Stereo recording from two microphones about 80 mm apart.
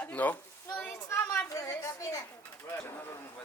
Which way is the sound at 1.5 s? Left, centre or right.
Left.